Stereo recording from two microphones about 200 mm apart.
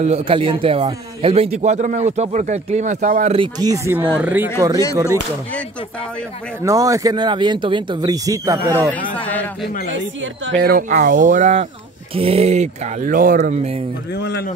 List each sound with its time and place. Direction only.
0.0 s a man's voice: 30° right (ahead or behind)
3.3 s speech: 20° right (ahead or behind)
6.6 s speech: 15° right (ahead or behind)
9.1 s a sound: 5° left (ahead or behind)
10.4 s a man's voice: 60° right (ahead or behind); by 13.8 s 35° right (ahead or behind)
14.1 s speech: 55° left (ahead or behind)